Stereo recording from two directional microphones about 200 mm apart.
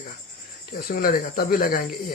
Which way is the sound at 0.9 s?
45° left (ahead or behind).